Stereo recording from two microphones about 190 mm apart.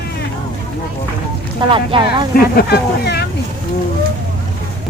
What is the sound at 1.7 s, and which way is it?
Speech, 25° right (ahead or behind).